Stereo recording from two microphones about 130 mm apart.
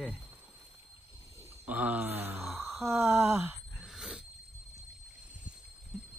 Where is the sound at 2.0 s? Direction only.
55° right (ahead or behind).